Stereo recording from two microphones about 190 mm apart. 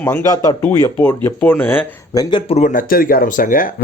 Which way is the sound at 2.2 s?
25° left (ahead or behind).